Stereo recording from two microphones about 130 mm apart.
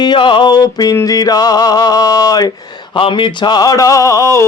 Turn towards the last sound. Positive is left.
turn(degrees=25)  # may be behind; listen again after turning